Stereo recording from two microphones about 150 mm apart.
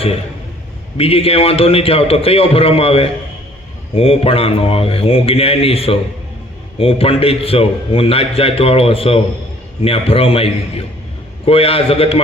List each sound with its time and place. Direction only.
0.9 s a man's voice: 40° left (ahead or behind)